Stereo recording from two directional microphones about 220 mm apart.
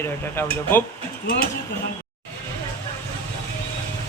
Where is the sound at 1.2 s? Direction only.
45° left (ahead or behind).